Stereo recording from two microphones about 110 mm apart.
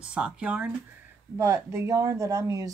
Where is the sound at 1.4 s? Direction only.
25° right (ahead or behind).